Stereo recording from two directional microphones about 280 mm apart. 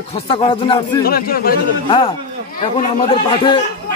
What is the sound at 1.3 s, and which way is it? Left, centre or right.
Speech, left.